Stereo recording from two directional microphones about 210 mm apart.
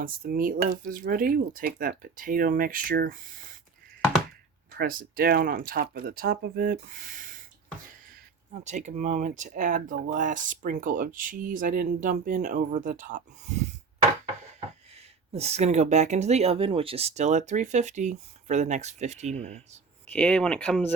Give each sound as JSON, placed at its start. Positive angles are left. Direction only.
{"t": 0.0, "sound": "speech", "side_deg": -45}
{"t": 4.8, "sound": "speech", "side_deg": -45}
{"t": 8.5, "sound": "speech", "side_deg": -35}
{"t": 15.3, "sound": "speech", "side_deg": -30}
{"t": 20.1, "sound": "speech", "side_deg": 5}